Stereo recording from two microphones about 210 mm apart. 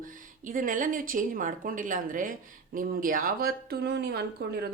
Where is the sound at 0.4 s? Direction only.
40° right (ahead or behind).